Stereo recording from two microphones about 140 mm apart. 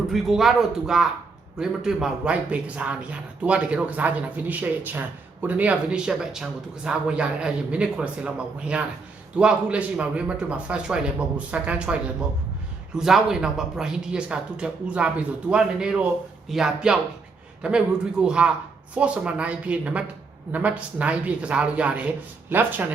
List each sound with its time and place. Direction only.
0.1 s speech: centre (ahead or behind)
13.0 s speech: 5° right (ahead or behind)